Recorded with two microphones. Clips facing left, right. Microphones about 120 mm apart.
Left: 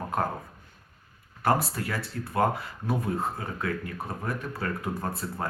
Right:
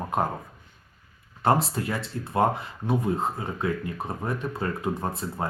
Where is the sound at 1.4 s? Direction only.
25° right (ahead or behind).